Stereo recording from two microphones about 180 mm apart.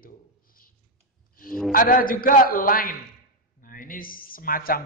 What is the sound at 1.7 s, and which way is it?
Speech, 50° left (ahead or behind).